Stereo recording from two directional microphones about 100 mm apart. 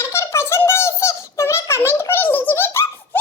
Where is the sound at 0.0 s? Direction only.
25° left (ahead or behind).